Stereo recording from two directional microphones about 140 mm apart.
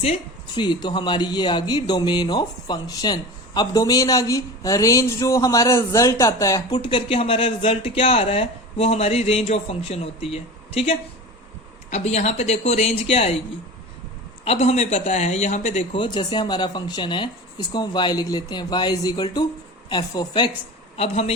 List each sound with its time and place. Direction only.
0.0 s a woman's voice: 45° left (ahead or behind)
0.6 s speech: 30° left (ahead or behind); by 13.3 s 50° left (ahead or behind)
14.4 s speech: 45° left (ahead or behind)
16.0 s speech: 35° left (ahead or behind)
20.9 s speech: 45° left (ahead or behind)